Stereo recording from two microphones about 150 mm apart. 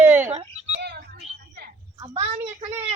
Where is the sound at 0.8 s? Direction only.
90° right.